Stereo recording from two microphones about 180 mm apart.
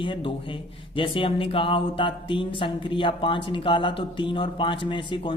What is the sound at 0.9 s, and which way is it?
Speech, 30° left (ahead or behind).